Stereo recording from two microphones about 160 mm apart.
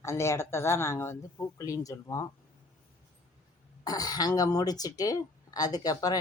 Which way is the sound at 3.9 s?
25° left (ahead or behind).